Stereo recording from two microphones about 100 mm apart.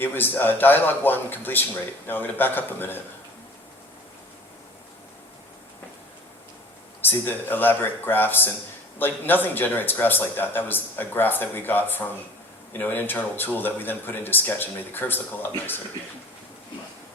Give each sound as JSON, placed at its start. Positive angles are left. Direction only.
{"t": 0.0, "sound": "speech", "side_deg": 20}
{"t": 7.0, "sound": "speech", "side_deg": 20}